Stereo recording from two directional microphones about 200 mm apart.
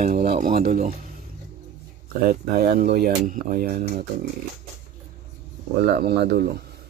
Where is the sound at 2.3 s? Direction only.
50° right (ahead or behind).